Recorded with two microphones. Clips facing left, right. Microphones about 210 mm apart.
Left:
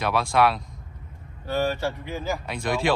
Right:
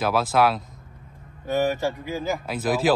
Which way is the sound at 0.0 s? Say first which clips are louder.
Right 1 dB; centre (ahead or behind).